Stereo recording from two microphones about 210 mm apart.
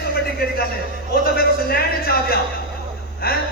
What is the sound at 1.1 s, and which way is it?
A man's voice, 45° left (ahead or behind).